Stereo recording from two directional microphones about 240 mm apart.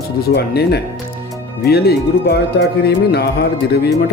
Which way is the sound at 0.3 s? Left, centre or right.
Left.